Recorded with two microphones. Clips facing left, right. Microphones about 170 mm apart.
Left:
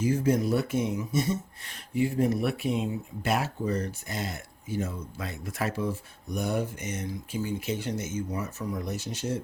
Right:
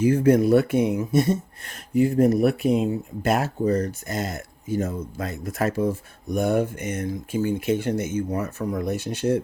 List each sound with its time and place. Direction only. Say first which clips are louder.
0.0 s speech: right 7 dB; 60° right (ahead or behind)